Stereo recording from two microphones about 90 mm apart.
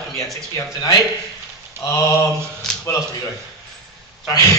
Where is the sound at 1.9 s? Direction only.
35° left (ahead or behind).